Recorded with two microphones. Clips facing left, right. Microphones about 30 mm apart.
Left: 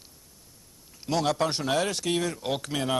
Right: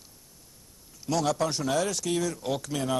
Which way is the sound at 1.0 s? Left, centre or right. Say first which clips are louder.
Left 1 dB; left.